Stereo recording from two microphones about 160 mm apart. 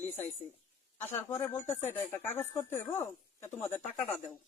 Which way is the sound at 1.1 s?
15° left (ahead or behind).